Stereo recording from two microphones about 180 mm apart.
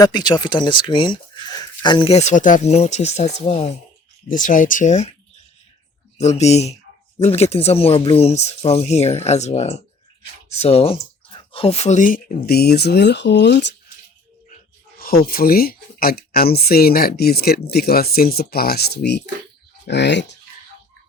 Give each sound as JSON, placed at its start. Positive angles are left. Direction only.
{"t": 0.0, "sound": "speech", "side_deg": 25}
{"t": 6.1, "sound": "speech", "side_deg": 35}
{"t": 14.9, "sound": "speech", "side_deg": 55}